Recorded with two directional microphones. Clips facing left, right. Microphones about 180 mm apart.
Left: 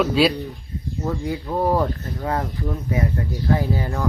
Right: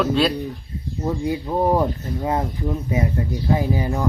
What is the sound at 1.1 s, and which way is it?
Speech, 20° right (ahead or behind).